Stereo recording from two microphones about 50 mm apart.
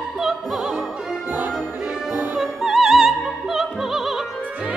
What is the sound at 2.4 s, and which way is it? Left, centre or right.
Opera, centre.